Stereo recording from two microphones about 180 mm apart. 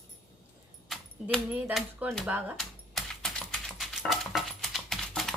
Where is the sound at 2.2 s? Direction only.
5° right (ahead or behind).